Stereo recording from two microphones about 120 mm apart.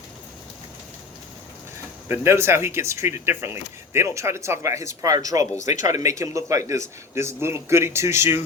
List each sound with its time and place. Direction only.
2.0 s speech: 20° right (ahead or behind)
5.5 s speech: 90° left
5.9 s speech: 30° right (ahead or behind)